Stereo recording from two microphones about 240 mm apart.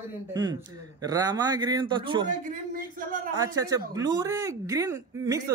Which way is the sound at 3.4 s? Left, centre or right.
Centre.